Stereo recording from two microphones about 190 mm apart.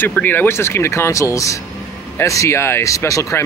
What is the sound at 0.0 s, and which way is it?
Speech, 10° left (ahead or behind).